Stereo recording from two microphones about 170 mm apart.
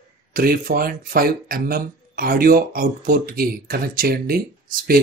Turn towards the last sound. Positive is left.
turn(degrees=-60)  # may be behind; listen again after turning